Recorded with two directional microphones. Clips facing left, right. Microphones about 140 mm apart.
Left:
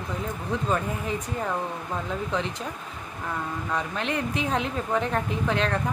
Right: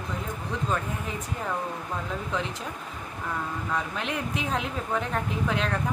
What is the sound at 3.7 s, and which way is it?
A woman's voice, 5° right (ahead or behind).